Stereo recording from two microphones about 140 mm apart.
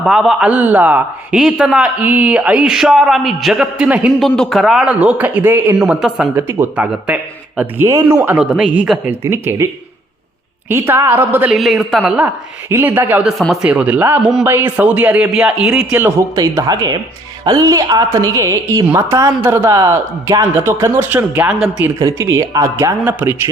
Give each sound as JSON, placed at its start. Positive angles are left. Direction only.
{"t": 0.0, "sound": "a man's voice", "side_deg": -5}
{"t": 4.2, "sound": "a man's voice", "side_deg": 0}
{"t": 6.3, "sound": "a man's voice", "side_deg": -15}
{"t": 7.9, "sound": "a man's voice", "side_deg": -25}
{"t": 10.7, "sound": "a man's voice", "side_deg": -15}
{"t": 11.5, "sound": "a man's voice", "side_deg": 0}
{"t": 13.2, "sound": "a man's voice", "side_deg": -5}
{"t": 16.3, "sound": "a man's voice", "side_deg": -25}
{"t": 21.9, "sound": "speech", "side_deg": -20}